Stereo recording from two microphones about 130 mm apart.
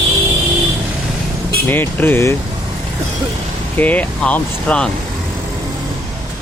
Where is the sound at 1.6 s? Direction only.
15° left (ahead or behind).